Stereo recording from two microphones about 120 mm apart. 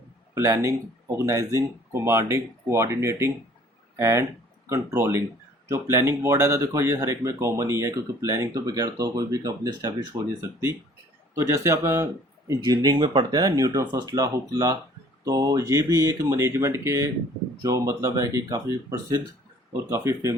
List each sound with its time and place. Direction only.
0.3 s speech: 25° right (ahead or behind)